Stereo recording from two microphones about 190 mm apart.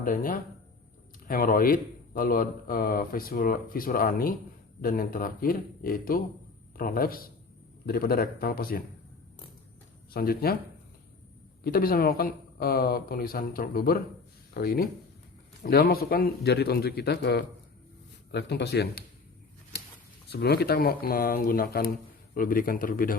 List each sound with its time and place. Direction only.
0.0 s a man's voice: 45° left (ahead or behind)
10.1 s a man's voice: 55° left (ahead or behind)
11.6 s a man's voice: 50° left (ahead or behind)
20.3 s a man's voice: 60° left (ahead or behind)